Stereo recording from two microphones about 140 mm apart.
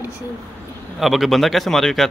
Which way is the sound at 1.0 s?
Centre (ahead or behind).